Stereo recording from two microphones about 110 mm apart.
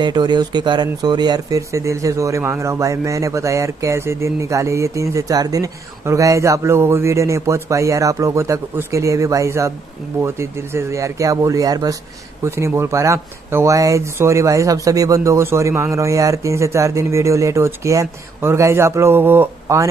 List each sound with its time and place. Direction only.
0.0 s speech: 40° right (ahead or behind); by 19.9 s 25° right (ahead or behind)